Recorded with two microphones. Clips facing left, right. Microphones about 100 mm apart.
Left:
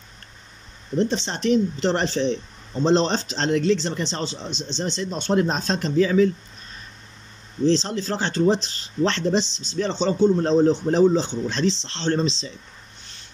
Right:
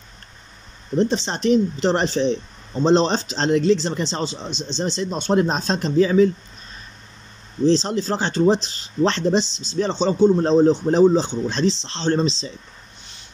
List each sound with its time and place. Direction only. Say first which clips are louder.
1.1 s speech: right 2 dB; 20° right (ahead or behind)
7.7 s speech: right 3 dB; 15° right (ahead or behind)
9.5 s speech: right 2 dB; 20° left (ahead or behind)
9.8 s speech: right 3 dB; 15° right (ahead or behind)
10.3 s speech: right 2 dB; 25° right (ahead or behind)